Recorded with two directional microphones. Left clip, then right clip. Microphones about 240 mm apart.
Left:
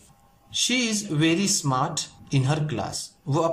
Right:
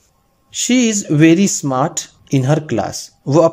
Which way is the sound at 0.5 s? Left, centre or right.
Right.